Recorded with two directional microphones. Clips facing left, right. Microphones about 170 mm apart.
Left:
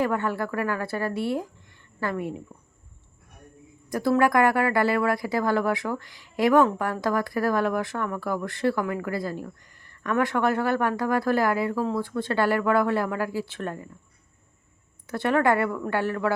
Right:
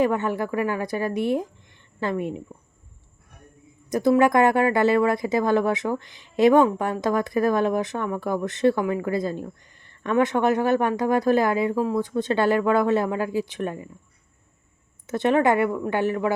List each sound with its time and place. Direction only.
0.0 s a woman's voice: 20° right (ahead or behind)
3.8 s speech: 20° right (ahead or behind)
15.0 s speech: 20° right (ahead or behind)